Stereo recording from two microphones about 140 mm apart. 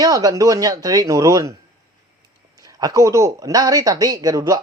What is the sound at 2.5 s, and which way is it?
Speech, 25° right (ahead or behind).